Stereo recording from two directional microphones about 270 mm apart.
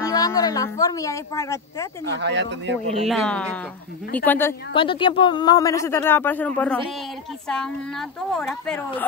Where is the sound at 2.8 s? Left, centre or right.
Right.